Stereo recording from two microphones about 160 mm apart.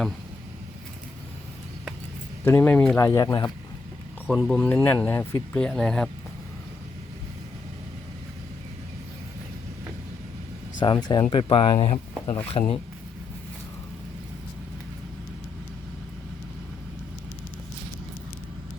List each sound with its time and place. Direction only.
2.4 s speech: 15° left (ahead or behind)
4.3 s speech: 5° left (ahead or behind)
10.8 s speech: 30° left (ahead or behind)